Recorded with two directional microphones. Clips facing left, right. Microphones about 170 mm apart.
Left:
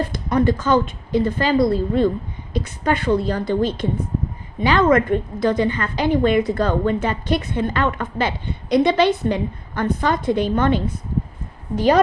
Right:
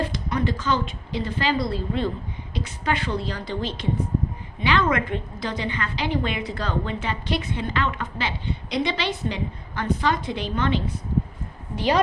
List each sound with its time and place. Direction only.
0.0 s a woman's voice: 45° left (ahead or behind)